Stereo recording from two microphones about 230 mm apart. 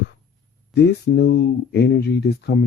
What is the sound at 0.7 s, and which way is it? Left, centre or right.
Speech, left.